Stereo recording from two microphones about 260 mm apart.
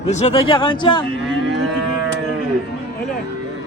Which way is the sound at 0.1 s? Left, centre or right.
Left.